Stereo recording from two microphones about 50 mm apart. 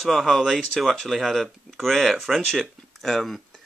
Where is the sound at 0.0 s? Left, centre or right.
Centre.